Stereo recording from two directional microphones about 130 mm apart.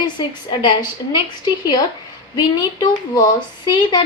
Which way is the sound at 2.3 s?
30° left (ahead or behind).